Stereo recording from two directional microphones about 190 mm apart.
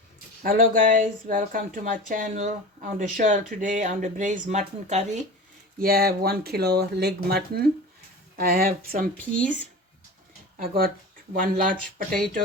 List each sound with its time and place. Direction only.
0.4 s speech: 50° right (ahead or behind)
5.8 s speech: 55° right (ahead or behind)
9.1 s speech: 5° left (ahead or behind)
10.6 s speech: 50° right (ahead or behind)
11.8 s speech: 5° left (ahead or behind)